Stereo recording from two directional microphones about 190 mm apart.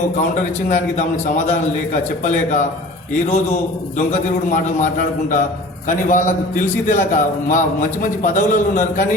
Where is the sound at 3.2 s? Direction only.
35° left (ahead or behind).